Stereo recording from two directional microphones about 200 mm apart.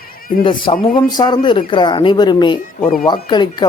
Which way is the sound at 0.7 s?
25° left (ahead or behind).